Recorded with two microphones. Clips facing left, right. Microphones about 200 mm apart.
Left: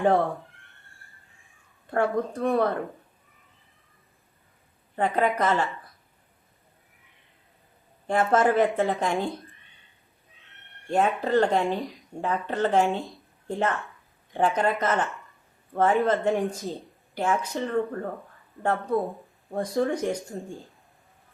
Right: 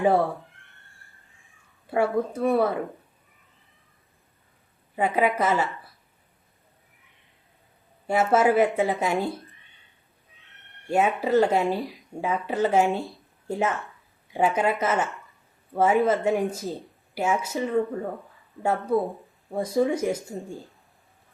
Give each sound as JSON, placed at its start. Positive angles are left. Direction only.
{"t": 0.0, "sound": "a sound", "side_deg": 0}
{"t": 1.9, "sound": "speech", "side_deg": -5}
{"t": 4.9, "sound": "speech", "side_deg": -10}
{"t": 8.0, "sound": "speech", "side_deg": -5}
{"t": 10.5, "sound": "speech", "side_deg": 0}